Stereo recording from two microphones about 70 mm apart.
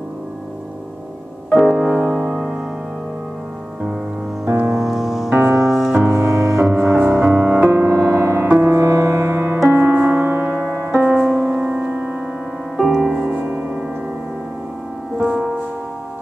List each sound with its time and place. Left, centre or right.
1.7 s music: right
4.7 s music: centre
5.3 s music: right
5.7 s music: centre
5.9 s music: right
10.7 s music: right
11.0 s music: centre
11.6 s music: right
12.7 s music: centre
13.3 s music: right
15.1 s music: centre